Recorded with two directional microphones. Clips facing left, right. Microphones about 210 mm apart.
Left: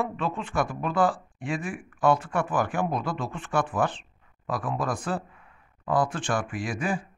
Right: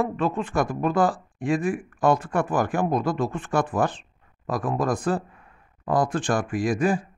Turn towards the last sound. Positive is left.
turn(degrees=-40)  # may be behind; listen again after turning